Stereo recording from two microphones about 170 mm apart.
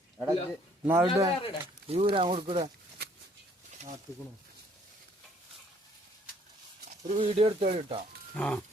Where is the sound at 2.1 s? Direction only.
35° right (ahead or behind).